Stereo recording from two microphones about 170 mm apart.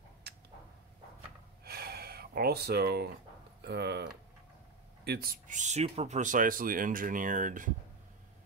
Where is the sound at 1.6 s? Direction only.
65° right (ahead or behind).